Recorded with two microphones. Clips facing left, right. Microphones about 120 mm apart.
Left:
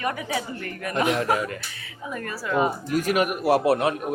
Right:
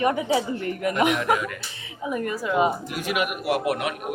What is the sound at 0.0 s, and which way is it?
A woman's voice, 25° right (ahead or behind).